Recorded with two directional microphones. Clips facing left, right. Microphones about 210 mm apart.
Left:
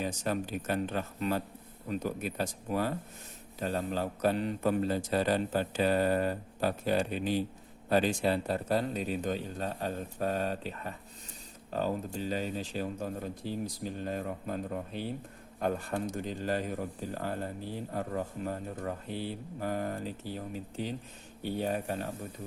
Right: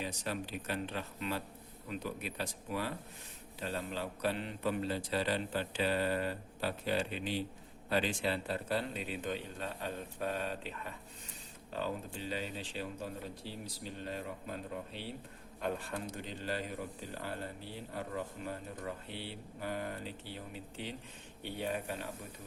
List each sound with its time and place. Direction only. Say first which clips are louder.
0.0 s a man's voice: left 6 dB; 45° left (ahead or behind)